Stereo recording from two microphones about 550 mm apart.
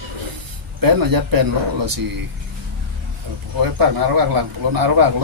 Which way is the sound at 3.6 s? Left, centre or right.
Right.